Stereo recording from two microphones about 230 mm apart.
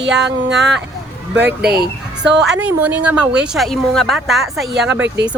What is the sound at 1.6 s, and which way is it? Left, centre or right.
Speech, right.